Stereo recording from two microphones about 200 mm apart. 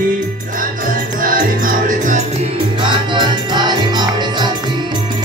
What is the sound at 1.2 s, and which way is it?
Music, 45° right (ahead or behind).